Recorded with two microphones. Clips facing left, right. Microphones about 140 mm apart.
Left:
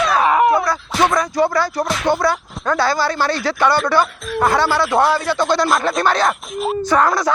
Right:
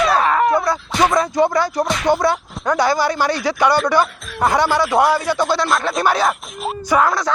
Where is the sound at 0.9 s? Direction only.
Centre (ahead or behind).